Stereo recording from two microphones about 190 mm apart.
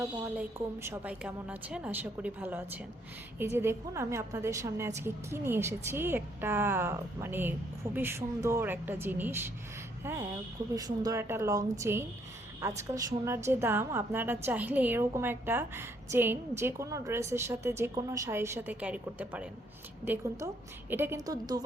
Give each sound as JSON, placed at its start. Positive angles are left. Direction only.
{"t": 0.0, "sound": "a woman's voice", "side_deg": -15}
{"t": 20.9, "sound": "a woman's voice", "side_deg": -10}